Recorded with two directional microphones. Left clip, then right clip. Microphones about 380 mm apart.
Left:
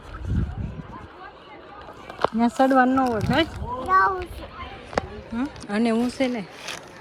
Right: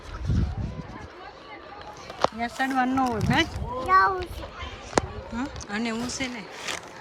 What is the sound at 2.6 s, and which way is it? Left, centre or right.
Speech, centre.